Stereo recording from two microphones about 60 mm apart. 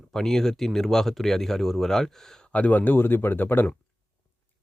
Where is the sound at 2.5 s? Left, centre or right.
Left.